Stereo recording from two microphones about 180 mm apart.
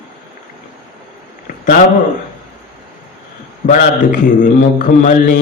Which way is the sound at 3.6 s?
50° left (ahead or behind).